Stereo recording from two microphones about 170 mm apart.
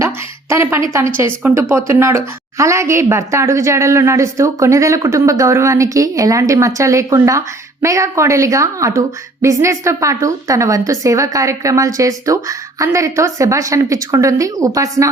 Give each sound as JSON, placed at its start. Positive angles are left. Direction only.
{"t": 0.5, "sound": "a woman's voice", "side_deg": -15}